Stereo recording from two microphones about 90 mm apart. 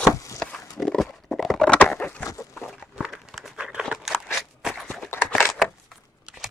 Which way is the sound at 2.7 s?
5° right (ahead or behind).